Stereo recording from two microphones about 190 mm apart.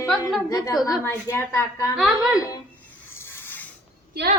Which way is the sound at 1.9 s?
Centre (ahead or behind).